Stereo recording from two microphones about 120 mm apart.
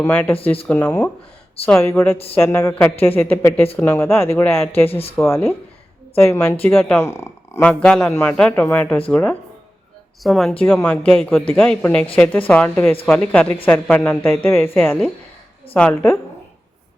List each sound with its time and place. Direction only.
0.0 s speech: 15° left (ahead or behind)
4.9 s speech: 55° left (ahead or behind)
5.2 s speech: 20° left (ahead or behind)
7.6 s speech: 10° left (ahead or behind)
10.2 s a man's voice: centre (ahead or behind)
10.6 s speech: 15° left (ahead or behind)
11.1 s a man's voice: centre (ahead or behind)